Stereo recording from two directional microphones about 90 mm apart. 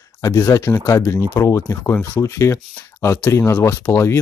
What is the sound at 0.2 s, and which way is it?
Speech, 30° left (ahead or behind).